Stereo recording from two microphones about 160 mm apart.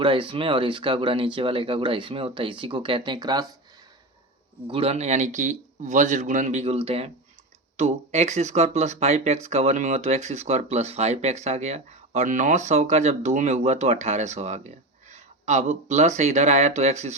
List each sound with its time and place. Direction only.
0.0 s speech: 30° right (ahead or behind)
4.7 s speech: 40° right (ahead or behind)